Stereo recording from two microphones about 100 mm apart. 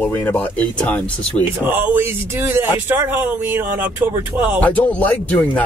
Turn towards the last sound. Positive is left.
turn(degrees=15)  # may be behind; listen again after turning